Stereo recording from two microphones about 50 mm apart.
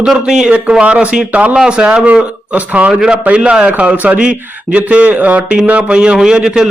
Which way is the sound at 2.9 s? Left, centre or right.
Centre.